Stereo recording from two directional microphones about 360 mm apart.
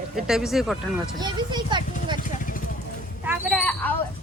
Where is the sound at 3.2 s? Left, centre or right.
Centre.